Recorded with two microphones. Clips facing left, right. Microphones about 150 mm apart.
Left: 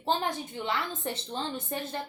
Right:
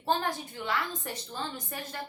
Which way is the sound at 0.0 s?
20° left (ahead or behind).